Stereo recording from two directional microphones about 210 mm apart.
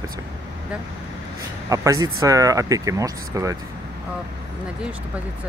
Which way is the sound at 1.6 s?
15° right (ahead or behind).